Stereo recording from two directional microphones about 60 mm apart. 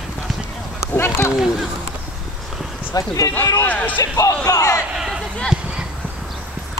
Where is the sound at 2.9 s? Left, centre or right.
Left.